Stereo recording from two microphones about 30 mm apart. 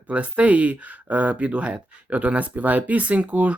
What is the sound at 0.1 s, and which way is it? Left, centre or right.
Speech, right.